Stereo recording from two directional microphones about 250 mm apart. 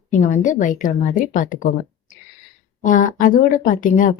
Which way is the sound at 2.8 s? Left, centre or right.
Left.